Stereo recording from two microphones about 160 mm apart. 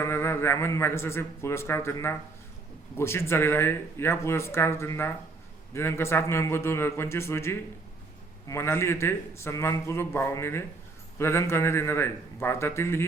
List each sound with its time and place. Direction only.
0.0 s speech: 15° left (ahead or behind)